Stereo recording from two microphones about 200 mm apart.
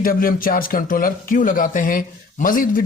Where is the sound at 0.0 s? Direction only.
45° left (ahead or behind).